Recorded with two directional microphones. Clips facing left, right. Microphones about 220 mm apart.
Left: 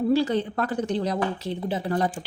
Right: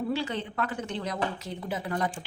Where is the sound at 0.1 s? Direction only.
40° left (ahead or behind).